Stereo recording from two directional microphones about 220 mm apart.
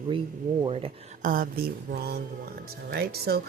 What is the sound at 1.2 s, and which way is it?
Speech, 40° right (ahead or behind).